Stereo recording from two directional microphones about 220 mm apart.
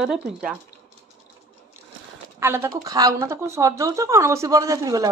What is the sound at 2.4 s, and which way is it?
Speech, 10° right (ahead or behind).